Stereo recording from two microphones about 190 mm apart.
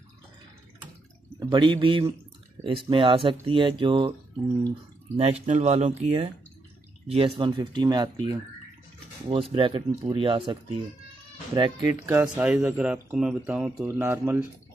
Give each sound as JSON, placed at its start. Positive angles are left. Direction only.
{"t": 1.5, "sound": "speech", "side_deg": -25}
{"t": 5.1, "sound": "speech", "side_deg": -30}
{"t": 12.1, "sound": "speech", "side_deg": -10}